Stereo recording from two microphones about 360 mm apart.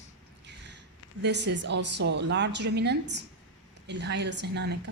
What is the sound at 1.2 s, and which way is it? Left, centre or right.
Speech, right.